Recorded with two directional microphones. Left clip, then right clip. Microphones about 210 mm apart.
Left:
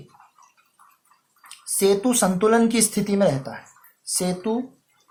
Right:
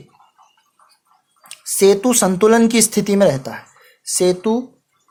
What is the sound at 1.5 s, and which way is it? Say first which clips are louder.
Speech: right 7 dB; 45° right (ahead or behind).